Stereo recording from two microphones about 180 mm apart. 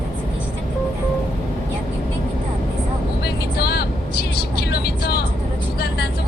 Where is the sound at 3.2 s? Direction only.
60° left (ahead or behind).